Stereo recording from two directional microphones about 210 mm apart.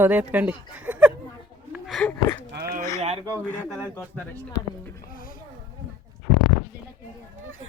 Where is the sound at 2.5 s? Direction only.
45° right (ahead or behind).